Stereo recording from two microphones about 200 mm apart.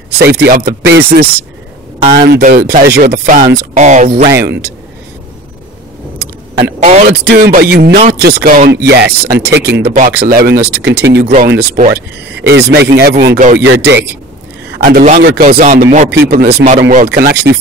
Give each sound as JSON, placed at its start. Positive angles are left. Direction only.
{"t": 0.2, "sound": "speech", "side_deg": -55}
{"t": 4.4, "sound": "speech", "side_deg": -55}
{"t": 6.6, "sound": "speech", "side_deg": -30}
{"t": 7.2, "sound": "speech", "side_deg": -50}
{"t": 15.0, "sound": "speech", "side_deg": -45}
{"t": 16.1, "sound": "speech", "side_deg": -50}